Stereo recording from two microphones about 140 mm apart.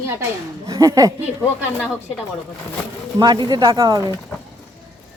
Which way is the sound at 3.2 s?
30° right (ahead or behind).